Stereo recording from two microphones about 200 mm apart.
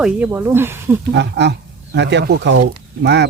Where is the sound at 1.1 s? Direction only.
60° right (ahead or behind).